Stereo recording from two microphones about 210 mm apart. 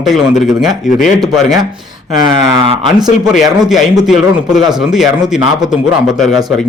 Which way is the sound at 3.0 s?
20° right (ahead or behind).